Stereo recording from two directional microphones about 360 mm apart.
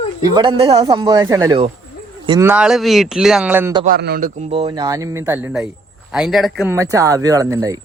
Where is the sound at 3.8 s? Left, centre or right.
Right; by 7.7 s centre.